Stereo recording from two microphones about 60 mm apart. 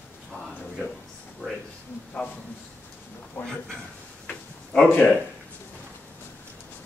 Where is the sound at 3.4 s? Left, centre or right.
Left.